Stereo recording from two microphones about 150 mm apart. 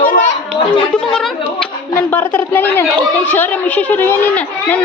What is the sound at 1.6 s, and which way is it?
Speech, 10° left (ahead or behind).